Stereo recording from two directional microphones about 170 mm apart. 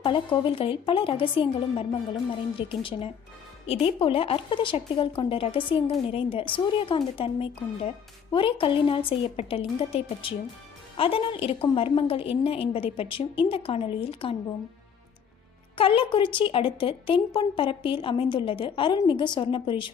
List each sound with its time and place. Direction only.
0.0 s speech: 30° left (ahead or behind)
15.8 s a woman's voice: 30° left (ahead or behind)